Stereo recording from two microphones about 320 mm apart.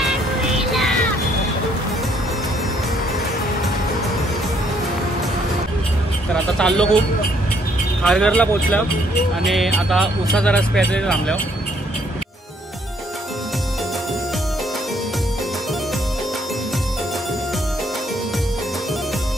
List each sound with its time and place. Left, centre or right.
0.7 s music: centre
6.3 s a sound: centre
8.0 s speech: centre